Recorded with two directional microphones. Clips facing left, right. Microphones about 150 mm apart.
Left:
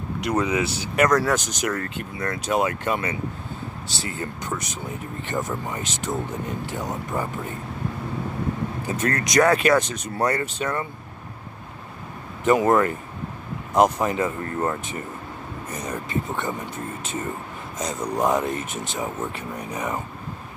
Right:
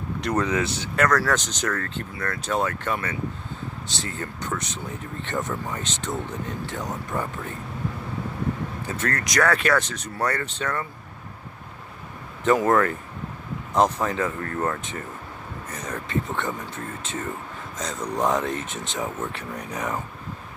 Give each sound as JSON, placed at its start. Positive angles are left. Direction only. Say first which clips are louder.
{"t": 0.2, "sound": "speech", "louder": "left 1 dB", "side_deg": 10}
{"t": 8.8, "sound": "speech", "louder": "left 3 dB", "side_deg": 15}
{"t": 12.4, "sound": "speech", "louder": "left 1 dB", "side_deg": 15}